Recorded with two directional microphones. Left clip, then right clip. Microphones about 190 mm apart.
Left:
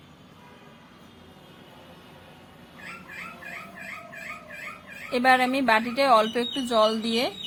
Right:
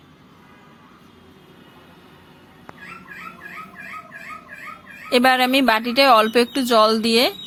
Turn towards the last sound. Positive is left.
turn(degrees=-20)  # may be behind; listen again after turning